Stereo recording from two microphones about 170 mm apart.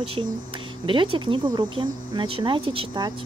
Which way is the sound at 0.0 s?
35° right (ahead or behind).